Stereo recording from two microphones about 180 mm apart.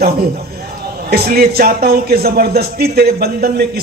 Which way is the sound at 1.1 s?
60° right (ahead or behind).